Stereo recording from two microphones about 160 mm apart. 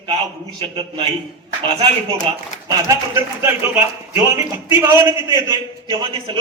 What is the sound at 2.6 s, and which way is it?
A man's voice, 20° right (ahead or behind).